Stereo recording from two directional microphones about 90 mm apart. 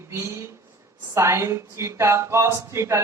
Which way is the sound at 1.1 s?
30° right (ahead or behind).